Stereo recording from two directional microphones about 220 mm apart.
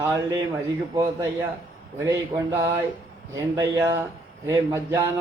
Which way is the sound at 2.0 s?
15° right (ahead or behind).